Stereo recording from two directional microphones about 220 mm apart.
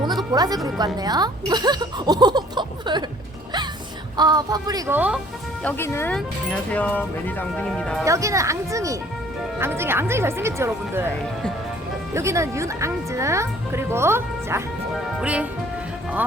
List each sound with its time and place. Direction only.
0.3 s speech: 15° right (ahead or behind)
4.2 s speech: 20° right (ahead or behind)
5.6 s speech: 10° left (ahead or behind)
8.0 s speech: 15° right (ahead or behind)
12.1 s speech: 15° right (ahead or behind)